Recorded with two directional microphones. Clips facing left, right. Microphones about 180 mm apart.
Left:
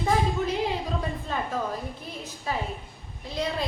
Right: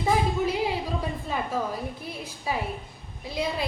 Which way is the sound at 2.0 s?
10° right (ahead or behind).